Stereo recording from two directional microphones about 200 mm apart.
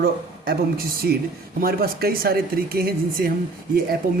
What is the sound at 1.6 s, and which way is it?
Speech, 50° right (ahead or behind).